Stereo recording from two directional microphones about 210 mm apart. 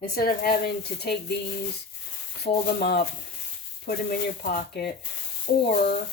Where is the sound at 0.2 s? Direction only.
45° left (ahead or behind).